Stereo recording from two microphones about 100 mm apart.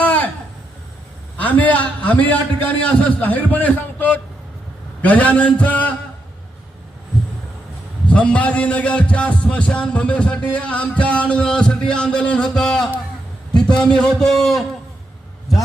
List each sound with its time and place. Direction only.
0.0 s a sound: 15° left (ahead or behind)
1.4 s a man's voice: 15° left (ahead or behind)
8.0 s a man's voice: 15° left (ahead or behind)